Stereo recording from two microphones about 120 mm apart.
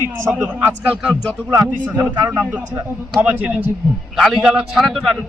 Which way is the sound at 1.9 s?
15° right (ahead or behind).